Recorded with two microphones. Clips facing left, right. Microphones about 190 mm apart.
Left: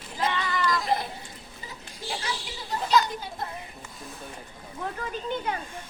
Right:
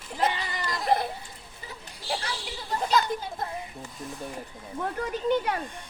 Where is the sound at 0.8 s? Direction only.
60° right (ahead or behind).